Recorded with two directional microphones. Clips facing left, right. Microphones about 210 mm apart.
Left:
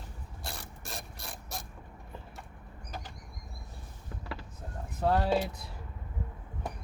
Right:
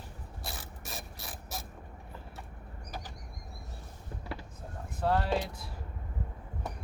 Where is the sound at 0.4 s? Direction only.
Centre (ahead or behind).